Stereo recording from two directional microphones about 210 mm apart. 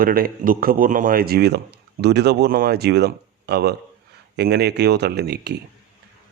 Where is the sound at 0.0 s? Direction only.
45° right (ahead or behind).